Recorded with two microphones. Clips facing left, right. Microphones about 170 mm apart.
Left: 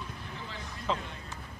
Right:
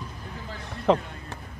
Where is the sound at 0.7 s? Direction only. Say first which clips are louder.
Right 12 dB; 65° right (ahead or behind).